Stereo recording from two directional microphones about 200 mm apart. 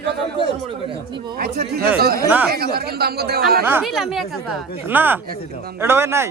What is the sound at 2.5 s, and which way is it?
Speech, 50° right (ahead or behind).